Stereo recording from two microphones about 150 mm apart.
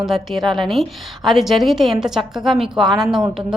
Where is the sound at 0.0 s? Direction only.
Centre (ahead or behind).